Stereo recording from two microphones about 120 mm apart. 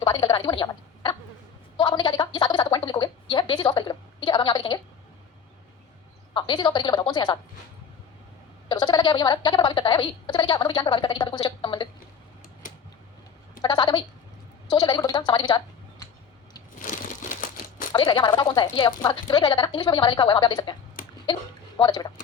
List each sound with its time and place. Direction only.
0.0 s a sound: 35° left (ahead or behind)
1.8 s gargling: 40° left (ahead or behind)
6.3 s a woman's voice: 40° left (ahead or behind)
8.7 s a woman's voice: 40° left (ahead or behind)
13.6 s a woman's voice: 35° left (ahead or behind)
17.9 s a woman's voice: 35° left (ahead or behind)
21.8 s speech: 40° left (ahead or behind)